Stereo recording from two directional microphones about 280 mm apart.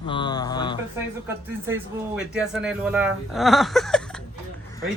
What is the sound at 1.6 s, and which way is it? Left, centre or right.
A man's voice, centre.